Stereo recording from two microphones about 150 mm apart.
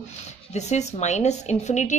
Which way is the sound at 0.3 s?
50° left (ahead or behind).